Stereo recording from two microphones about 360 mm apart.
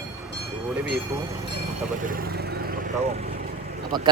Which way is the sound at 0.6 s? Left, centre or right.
Centre.